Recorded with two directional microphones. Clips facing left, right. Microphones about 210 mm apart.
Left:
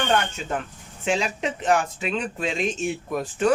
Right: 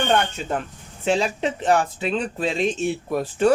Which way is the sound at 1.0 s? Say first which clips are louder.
Right 3 dB; 35° right (ahead or behind).